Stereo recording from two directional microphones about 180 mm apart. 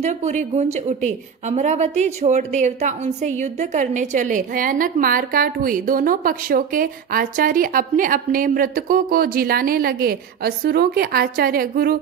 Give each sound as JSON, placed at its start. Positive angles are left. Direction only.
{"t": 0.0, "sound": "speech", "side_deg": -40}